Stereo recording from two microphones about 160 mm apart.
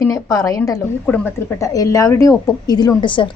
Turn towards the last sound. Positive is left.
turn(degrees=30)  # may be behind; listen again after turning